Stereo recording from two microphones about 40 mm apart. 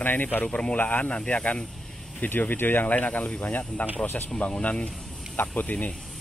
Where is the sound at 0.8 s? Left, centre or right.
Left.